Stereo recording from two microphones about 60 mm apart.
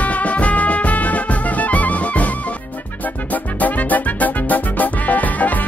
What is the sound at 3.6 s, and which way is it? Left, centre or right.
Music, left.